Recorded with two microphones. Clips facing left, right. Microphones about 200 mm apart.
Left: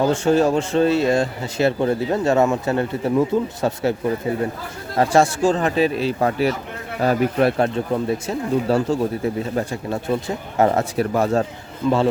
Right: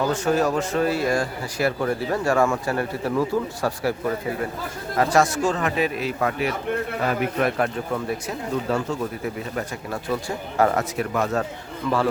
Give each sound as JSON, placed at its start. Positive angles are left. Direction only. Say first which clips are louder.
{"t": 0.0, "sound": "speech", "louder": "left 4 dB", "side_deg": 25}
{"t": 4.9, "sound": "speech", "louder": "left 3 dB", "side_deg": 30}